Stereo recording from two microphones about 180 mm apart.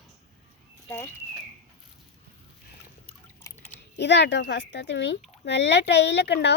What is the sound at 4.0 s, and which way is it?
Speech, 75° left (ahead or behind).